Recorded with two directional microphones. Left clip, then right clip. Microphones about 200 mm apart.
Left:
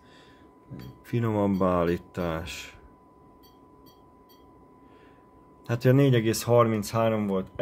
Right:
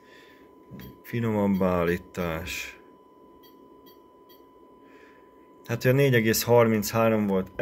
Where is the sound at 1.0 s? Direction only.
30° left (ahead or behind).